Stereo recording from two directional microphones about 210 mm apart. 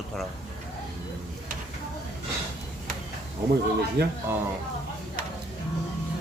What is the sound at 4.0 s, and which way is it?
Speech, 50° right (ahead or behind).